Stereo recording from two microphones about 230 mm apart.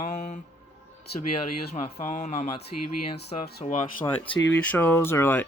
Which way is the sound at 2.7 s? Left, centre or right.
Left.